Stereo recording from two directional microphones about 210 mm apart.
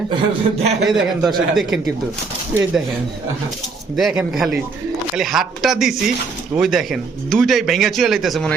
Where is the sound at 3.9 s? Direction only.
Centre (ahead or behind).